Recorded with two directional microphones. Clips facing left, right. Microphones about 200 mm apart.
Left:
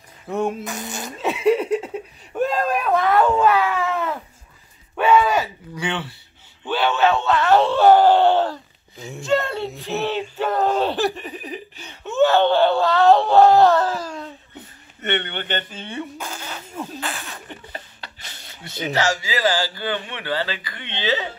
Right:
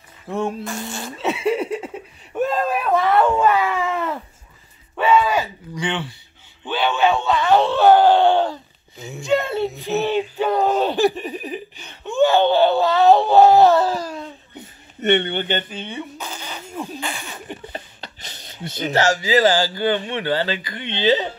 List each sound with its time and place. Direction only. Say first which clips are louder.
0.3 s speech: left 1 dB; centre (ahead or behind)
0.7 s speech: right 1 dB; 15° left (ahead or behind)
1.3 s a sound: left 4 dB; 10° right (ahead or behind)
6.6 s speech: even; 5° left (ahead or behind)
11.7 s wail: right 1 dB; 5° left (ahead or behind); by 14.2 s 10° right (ahead or behind)
15.0 s speech: right 7 dB; 10° right (ahead or behind)
16.2 s a sound: even; 5° left (ahead or behind)
17.7 s a sound: right 3 dB; 20° right (ahead or behind)
19.2 s speech: right 5 dB; 25° right (ahead or behind)